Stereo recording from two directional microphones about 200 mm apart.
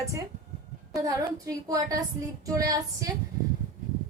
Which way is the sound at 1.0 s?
15° right (ahead or behind).